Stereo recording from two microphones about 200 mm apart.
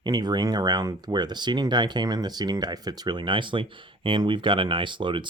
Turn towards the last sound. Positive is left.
turn(degrees=-25)  # may be behind; listen again after turning